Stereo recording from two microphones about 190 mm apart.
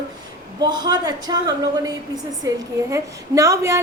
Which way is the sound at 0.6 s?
20° right (ahead or behind).